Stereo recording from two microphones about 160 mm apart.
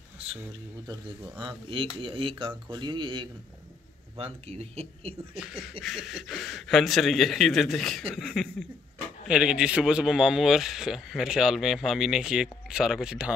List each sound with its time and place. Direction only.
0.4 s speech: 25° right (ahead or behind)
1.7 s speech: 35° right (ahead or behind)
5.4 s speech: centre (ahead or behind)